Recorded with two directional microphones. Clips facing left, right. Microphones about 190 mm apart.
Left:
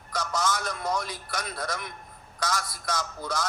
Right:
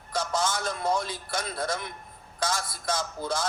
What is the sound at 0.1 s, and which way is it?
A man's voice, 30° right (ahead or behind).